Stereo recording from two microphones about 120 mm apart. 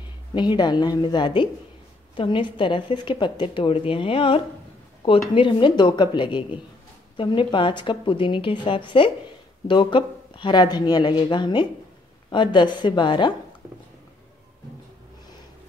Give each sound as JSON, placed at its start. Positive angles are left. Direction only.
{"t": 0.3, "sound": "a woman's voice", "side_deg": 40}